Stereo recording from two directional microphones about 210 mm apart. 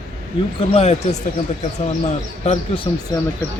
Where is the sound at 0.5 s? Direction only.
30° left (ahead or behind).